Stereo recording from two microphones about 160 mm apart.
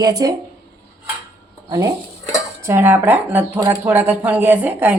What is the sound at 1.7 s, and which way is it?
A woman's voice, 20° right (ahead or behind).